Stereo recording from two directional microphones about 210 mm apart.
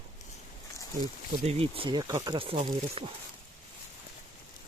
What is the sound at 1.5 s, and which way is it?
Speech, 25° right (ahead or behind).